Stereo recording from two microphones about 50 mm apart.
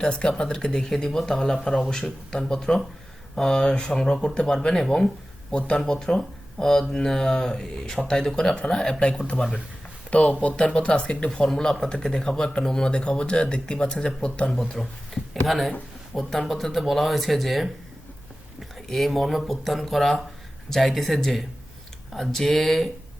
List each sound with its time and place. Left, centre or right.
0.0 s speech: centre
11.4 s speech: centre
18.9 s speech: centre